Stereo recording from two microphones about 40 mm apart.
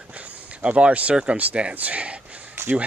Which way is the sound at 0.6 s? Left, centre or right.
Right.